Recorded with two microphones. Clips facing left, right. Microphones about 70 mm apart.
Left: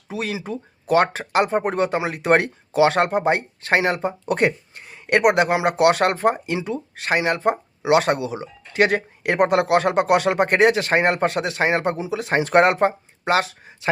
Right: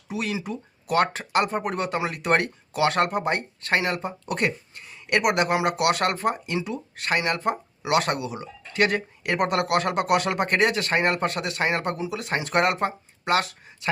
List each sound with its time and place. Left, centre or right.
0.4 s speech: left